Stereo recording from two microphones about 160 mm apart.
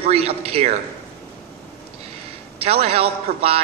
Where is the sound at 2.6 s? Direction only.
40° right (ahead or behind).